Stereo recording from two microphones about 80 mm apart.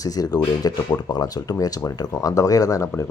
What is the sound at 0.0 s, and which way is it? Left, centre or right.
Speech, left.